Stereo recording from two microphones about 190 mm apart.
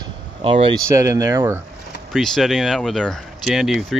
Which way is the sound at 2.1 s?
Centre (ahead or behind).